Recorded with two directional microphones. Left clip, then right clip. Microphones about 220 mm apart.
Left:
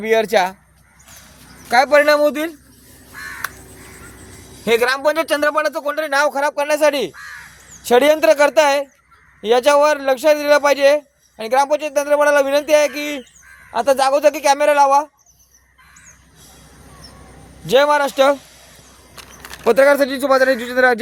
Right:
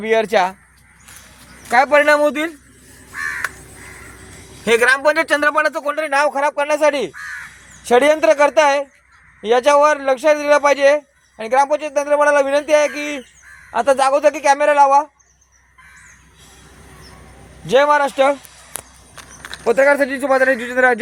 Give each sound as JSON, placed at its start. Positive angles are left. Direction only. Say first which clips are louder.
{"t": 0.0, "sound": "a man's voice", "louder": "even", "side_deg": 5}
{"t": 1.7, "sound": "a man's voice", "louder": "even", "side_deg": 5}
{"t": 4.6, "sound": "a man's voice", "louder": "right 2 dB", "side_deg": 0}
{"t": 17.7, "sound": "a man's voice", "louder": "even", "side_deg": 15}
{"t": 19.6, "sound": "a man's voice", "louder": "left 1 dB", "side_deg": 30}